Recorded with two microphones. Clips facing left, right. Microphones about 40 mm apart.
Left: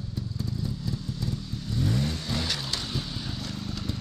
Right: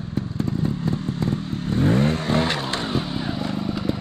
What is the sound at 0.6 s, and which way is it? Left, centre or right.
Vehicle, right.